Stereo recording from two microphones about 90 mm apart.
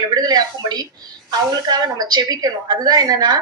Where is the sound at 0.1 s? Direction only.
50° right (ahead or behind).